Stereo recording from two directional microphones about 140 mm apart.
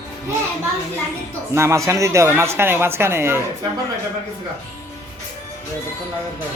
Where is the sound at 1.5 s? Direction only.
20° right (ahead or behind).